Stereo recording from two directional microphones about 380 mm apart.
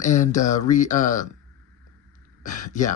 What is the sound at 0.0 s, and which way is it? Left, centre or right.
Speech, centre.